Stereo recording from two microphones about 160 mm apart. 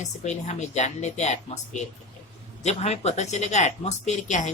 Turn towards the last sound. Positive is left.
turn(degrees=50)  # may be behind; listen again after turning